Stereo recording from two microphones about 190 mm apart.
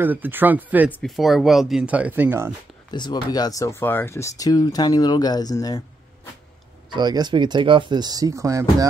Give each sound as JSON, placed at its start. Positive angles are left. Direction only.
{"t": 0.0, "sound": "speech", "side_deg": -10}
{"t": 2.9, "sound": "speech", "side_deg": 20}
{"t": 6.9, "sound": "speech", "side_deg": -20}